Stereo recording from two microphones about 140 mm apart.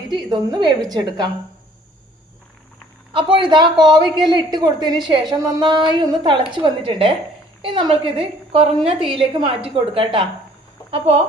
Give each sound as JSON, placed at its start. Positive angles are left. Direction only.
{"t": 0.1, "sound": "a woman's voice", "side_deg": -30}
{"t": 3.1, "sound": "a woman's voice", "side_deg": -35}